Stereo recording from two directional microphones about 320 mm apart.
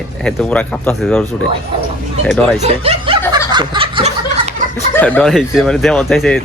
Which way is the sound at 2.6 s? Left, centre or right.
Centre.